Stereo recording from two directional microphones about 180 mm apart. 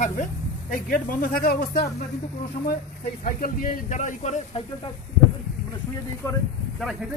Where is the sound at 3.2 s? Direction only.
50° left (ahead or behind).